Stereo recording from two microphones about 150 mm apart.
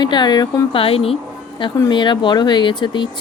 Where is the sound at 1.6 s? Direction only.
30° left (ahead or behind).